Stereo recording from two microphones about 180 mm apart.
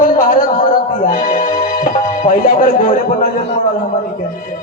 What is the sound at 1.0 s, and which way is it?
Music, 50° left (ahead or behind).